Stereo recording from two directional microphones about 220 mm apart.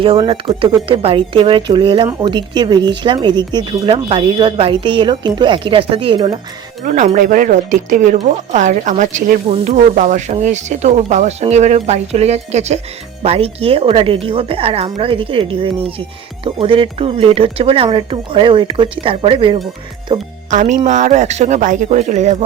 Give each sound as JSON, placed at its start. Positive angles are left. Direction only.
{"t": 0.0, "sound": "speech", "side_deg": -25}
{"t": 6.8, "sound": "speech", "side_deg": -35}
{"t": 20.5, "sound": "speech", "side_deg": -35}